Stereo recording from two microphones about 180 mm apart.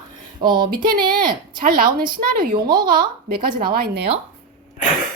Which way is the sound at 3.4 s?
25° right (ahead or behind).